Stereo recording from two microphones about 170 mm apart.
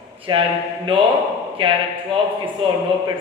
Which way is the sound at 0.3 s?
30° right (ahead or behind).